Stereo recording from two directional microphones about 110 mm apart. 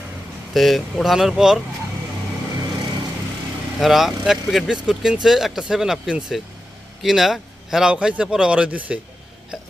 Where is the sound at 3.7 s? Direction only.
Centre (ahead or behind).